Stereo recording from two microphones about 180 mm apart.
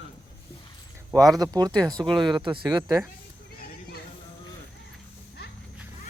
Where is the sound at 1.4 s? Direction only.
20° right (ahead or behind).